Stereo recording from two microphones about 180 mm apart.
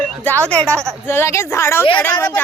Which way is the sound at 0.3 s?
5° left (ahead or behind).